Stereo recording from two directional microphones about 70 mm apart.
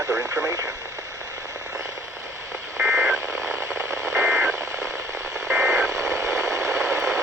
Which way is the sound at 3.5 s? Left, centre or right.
Right.